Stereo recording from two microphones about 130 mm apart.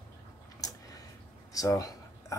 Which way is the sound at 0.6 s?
30° left (ahead or behind).